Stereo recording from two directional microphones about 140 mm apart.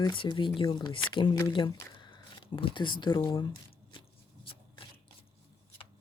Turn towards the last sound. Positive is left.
turn(degrees=40)  # may be behind; listen again after turning